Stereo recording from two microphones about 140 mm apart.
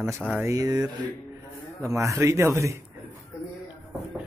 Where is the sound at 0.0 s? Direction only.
20° right (ahead or behind).